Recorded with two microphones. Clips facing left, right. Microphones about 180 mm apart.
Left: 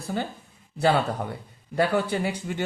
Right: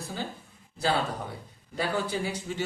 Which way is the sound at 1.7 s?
60° left (ahead or behind).